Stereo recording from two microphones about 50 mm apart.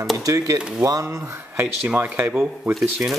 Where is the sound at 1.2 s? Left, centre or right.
Right.